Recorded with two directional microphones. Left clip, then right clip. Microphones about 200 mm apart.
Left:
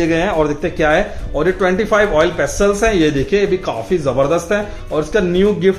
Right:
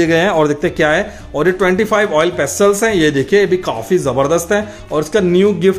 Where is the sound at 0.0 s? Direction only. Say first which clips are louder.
Right 3 dB; 45° right (ahead or behind).